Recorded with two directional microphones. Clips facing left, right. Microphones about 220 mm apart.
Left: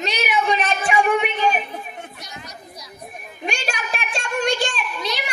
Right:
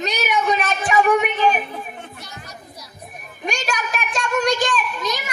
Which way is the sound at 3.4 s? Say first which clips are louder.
Right 2 dB; 40° right (ahead or behind).